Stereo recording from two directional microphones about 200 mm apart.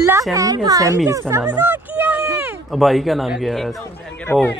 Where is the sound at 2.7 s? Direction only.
Centre (ahead or behind).